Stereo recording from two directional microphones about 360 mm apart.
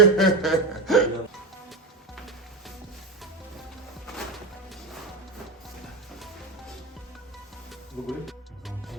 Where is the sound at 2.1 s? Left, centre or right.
Centre.